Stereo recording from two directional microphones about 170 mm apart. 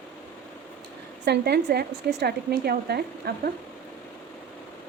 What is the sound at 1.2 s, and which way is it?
A woman's voice, 75° right (ahead or behind).